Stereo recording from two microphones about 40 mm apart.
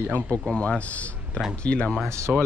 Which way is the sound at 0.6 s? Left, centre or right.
Left.